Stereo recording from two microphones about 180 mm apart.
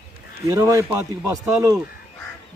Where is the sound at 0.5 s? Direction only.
20° right (ahead or behind).